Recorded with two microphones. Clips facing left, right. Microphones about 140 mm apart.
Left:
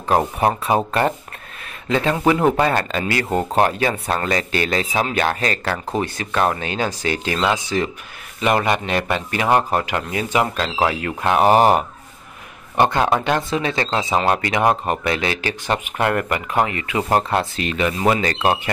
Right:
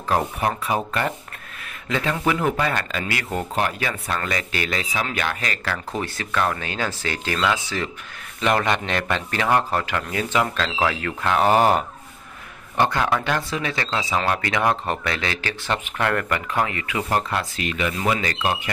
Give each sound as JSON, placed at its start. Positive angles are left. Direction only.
{"t": 0.1, "sound": "speech", "side_deg": 30}
{"t": 5.9, "sound": "speech", "side_deg": 25}